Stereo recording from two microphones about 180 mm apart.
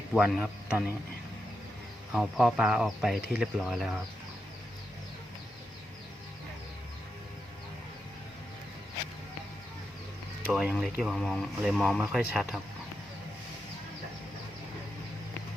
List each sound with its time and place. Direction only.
0.1 s speech: 5° right (ahead or behind)
2.1 s speech: 5° right (ahead or behind)
10.5 s speech: 5° right (ahead or behind)